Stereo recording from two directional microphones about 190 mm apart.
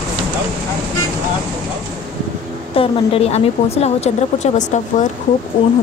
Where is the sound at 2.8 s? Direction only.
30° left (ahead or behind).